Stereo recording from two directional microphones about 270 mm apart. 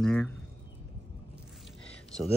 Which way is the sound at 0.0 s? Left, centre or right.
Centre.